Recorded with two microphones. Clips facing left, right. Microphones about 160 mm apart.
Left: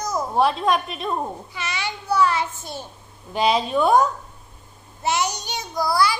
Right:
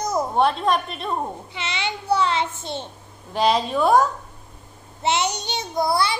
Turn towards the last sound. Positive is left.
turn(degrees=-25)  # may be behind; listen again after turning